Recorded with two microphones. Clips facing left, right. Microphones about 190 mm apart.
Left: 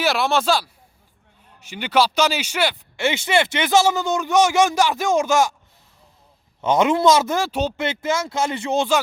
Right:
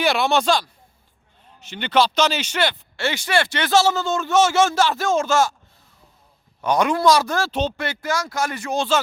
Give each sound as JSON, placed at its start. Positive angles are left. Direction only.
{"t": 0.0, "sound": "speech", "side_deg": 0}
{"t": 6.6, "sound": "speech", "side_deg": 20}